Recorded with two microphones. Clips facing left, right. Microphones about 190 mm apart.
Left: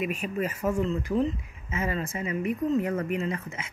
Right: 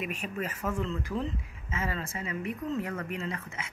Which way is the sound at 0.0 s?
10° left (ahead or behind).